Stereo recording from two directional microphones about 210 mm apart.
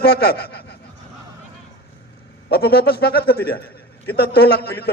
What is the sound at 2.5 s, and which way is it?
A man's voice, 50° left (ahead or behind).